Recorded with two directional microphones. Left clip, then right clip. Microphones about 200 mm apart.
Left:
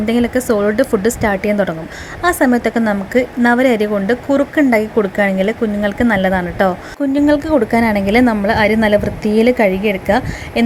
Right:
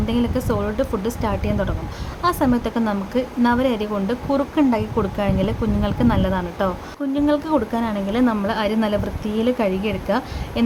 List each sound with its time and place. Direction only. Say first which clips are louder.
0.0 s a woman's voice: left 7 dB; 20° left (ahead or behind)